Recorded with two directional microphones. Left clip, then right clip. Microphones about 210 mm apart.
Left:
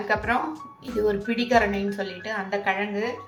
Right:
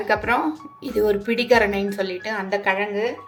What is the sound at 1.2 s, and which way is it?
A woman's voice, 55° right (ahead or behind).